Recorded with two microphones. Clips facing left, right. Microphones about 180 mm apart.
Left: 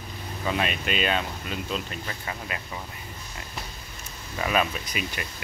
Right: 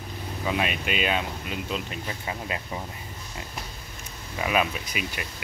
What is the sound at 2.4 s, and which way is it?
Speech, 25° right (ahead or behind).